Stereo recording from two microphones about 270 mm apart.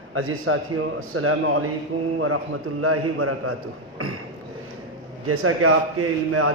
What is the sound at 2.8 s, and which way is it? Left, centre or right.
A man's voice, right.